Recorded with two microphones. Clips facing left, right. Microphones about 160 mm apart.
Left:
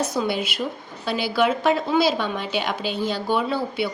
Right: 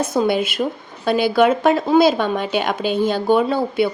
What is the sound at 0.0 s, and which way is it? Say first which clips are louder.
Speech: right 6 dB; 50° right (ahead or behind).